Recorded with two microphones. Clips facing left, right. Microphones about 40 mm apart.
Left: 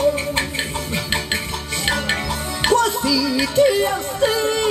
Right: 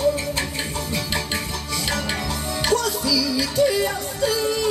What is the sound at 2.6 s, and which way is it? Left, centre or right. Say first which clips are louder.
Music: left 5 dB; left.